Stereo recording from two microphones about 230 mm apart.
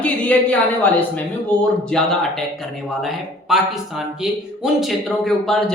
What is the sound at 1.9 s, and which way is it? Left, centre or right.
Speech, centre.